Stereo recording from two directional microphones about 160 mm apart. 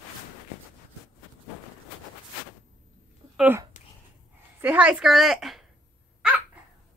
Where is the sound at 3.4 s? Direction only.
15° right (ahead or behind).